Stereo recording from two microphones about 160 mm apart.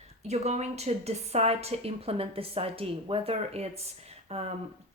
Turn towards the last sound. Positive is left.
turn(degrees=-40)  # may be behind; listen again after turning